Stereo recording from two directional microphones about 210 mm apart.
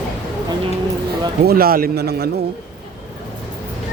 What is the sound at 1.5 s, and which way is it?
Speech, 45° right (ahead or behind).